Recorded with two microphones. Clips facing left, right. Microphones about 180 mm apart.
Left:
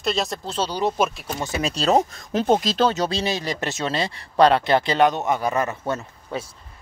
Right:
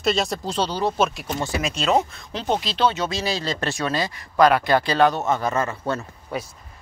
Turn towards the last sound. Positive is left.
turn(degrees=20)  # may be behind; listen again after turning